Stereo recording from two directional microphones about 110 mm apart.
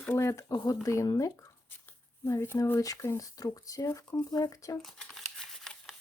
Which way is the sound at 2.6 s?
30° left (ahead or behind).